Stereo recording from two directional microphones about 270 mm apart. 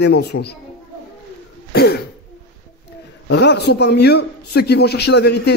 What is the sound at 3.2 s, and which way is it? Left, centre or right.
A man's voice, left.